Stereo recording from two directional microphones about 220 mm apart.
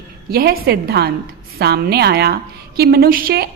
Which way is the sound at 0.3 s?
45° right (ahead or behind).